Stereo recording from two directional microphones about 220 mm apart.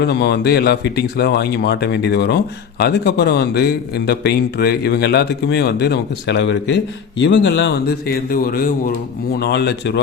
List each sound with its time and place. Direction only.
0.0 s speech: 50° left (ahead or behind)